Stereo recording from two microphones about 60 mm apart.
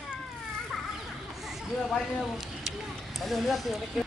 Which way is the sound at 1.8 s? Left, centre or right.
Centre.